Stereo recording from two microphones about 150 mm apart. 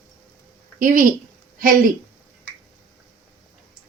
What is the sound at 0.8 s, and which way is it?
Speech, 65° right (ahead or behind).